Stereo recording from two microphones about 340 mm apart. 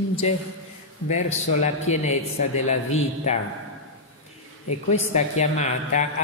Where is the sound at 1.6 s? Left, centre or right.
Centre.